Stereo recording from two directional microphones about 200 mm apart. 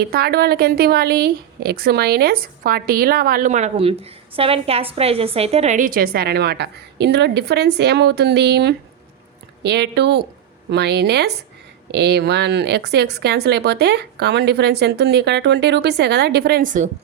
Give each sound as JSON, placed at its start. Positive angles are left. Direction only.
{"t": 0.0, "sound": "a woman's voice", "side_deg": -50}